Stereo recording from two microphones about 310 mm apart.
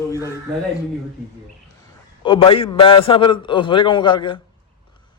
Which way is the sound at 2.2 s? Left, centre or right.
Centre.